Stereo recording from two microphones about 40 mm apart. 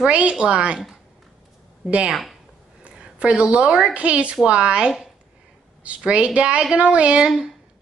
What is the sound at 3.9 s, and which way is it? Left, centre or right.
A woman's voice, right.